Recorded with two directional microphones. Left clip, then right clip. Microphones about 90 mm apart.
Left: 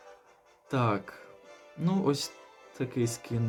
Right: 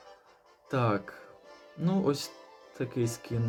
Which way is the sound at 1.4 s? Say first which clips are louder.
Even; 55° right (ahead or behind).